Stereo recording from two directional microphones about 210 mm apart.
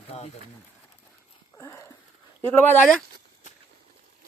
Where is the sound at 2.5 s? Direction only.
10° left (ahead or behind).